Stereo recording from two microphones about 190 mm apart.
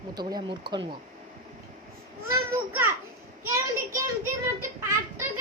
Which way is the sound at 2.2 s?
10° right (ahead or behind).